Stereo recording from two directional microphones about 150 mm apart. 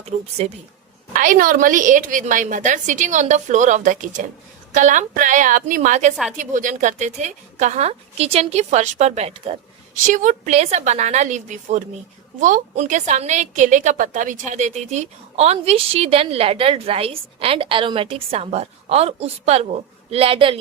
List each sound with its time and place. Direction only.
0.0 s a woman's voice: 45° right (ahead or behind)
1.1 s a woman's voice: 60° right (ahead or behind); by 20.6 s 35° right (ahead or behind)